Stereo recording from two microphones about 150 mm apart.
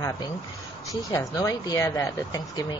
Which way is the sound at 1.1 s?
20° left (ahead or behind).